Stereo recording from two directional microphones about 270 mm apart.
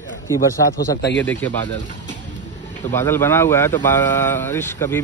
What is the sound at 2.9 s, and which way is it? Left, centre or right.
Speech, centre.